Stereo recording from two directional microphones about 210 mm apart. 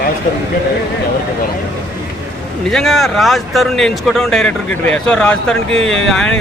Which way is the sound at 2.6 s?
Centre (ahead or behind).